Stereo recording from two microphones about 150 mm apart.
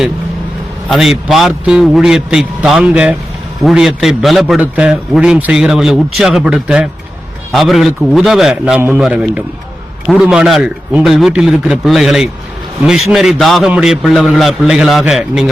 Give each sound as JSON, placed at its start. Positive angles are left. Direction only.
{"t": 0.9, "sound": "a man's voice", "side_deg": 0}